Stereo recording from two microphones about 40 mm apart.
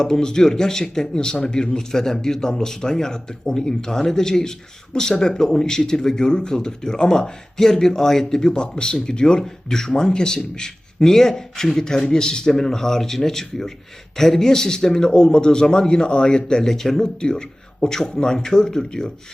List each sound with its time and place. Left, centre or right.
0.0 s speech: centre
16.6 s speech: centre
17.2 s a man's voice: left